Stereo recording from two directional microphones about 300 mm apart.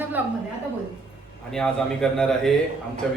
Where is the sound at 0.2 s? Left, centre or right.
Centre.